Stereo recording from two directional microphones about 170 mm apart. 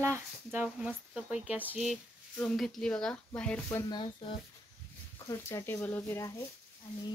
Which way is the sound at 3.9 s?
30° left (ahead or behind).